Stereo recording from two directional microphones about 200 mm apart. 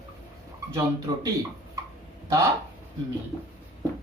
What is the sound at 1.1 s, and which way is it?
Speech, 20° right (ahead or behind).